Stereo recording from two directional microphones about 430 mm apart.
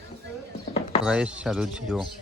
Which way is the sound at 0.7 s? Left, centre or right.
Centre.